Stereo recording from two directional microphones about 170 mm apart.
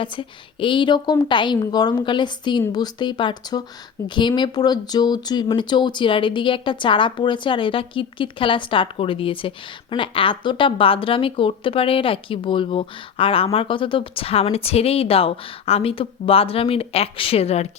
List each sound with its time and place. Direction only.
0.0 s speech: 30° left (ahead or behind)